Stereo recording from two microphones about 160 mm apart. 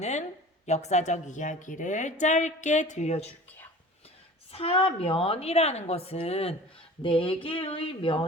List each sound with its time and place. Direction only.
0.0 s a woman's voice: 45° left (ahead or behind)
4.5 s a woman's voice: 35° left (ahead or behind)